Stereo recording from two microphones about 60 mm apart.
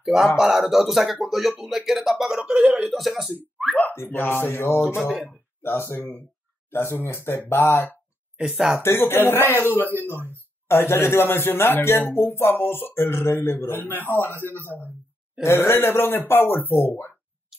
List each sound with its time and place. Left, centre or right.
0.0 s speech: centre
2.9 s speech: centre
3.9 s speech: left
8.4 s speech: centre
8.7 s speech: left
15.4 s speech: left